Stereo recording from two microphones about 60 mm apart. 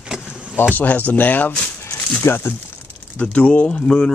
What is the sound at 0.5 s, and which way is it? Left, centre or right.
Speech, left.